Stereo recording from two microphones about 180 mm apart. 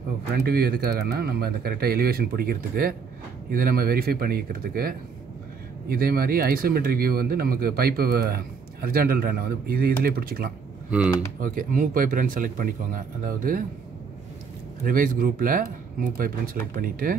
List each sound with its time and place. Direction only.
0.3 s speech: 60° right (ahead or behind)
10.9 s speech: 5° right (ahead or behind)
11.4 s speech: 50° right (ahead or behind)
14.8 s speech: 50° right (ahead or behind)